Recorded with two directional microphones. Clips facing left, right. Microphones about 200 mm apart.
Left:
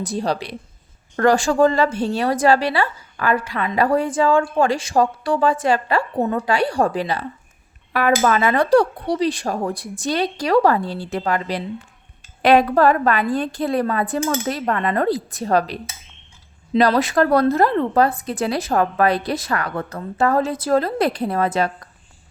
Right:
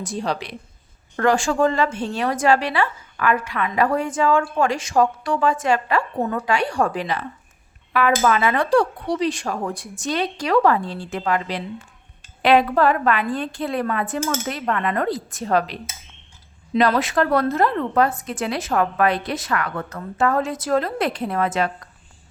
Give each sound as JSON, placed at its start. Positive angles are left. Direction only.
{"t": 0.0, "sound": "a woman's voice", "side_deg": 35}